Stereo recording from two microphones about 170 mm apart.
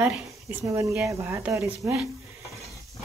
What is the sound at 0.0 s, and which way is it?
Speech, 15° right (ahead or behind).